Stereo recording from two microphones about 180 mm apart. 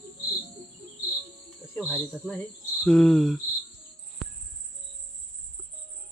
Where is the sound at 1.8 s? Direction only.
5° right (ahead or behind).